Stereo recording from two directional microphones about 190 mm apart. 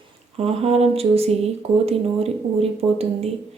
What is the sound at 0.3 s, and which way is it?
Speech, 30° right (ahead or behind).